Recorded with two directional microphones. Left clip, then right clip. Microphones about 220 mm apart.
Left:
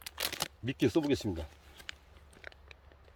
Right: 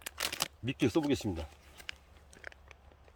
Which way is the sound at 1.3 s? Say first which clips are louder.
Even; centre (ahead or behind).